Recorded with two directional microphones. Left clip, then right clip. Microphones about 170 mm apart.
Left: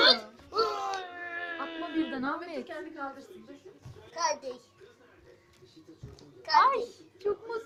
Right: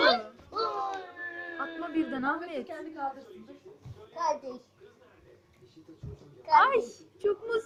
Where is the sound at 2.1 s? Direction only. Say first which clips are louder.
Right 3 dB; 15° left (ahead or behind).